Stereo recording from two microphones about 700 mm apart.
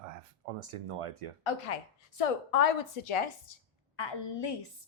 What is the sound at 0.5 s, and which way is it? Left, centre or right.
Speech, right.